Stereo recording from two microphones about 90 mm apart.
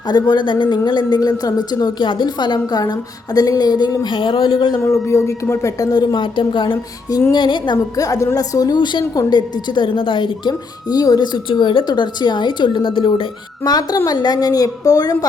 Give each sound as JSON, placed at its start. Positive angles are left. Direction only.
{"t": 0.1, "sound": "a woman's voice", "side_deg": 50}
{"t": 4.0, "sound": "speech", "side_deg": 65}
{"t": 4.8, "sound": "a woman's voice", "side_deg": 30}
{"t": 7.9, "sound": "a woman's voice", "side_deg": 40}
{"t": 11.9, "sound": "a woman's voice", "side_deg": 55}
{"t": 13.7, "sound": "a woman's voice", "side_deg": 50}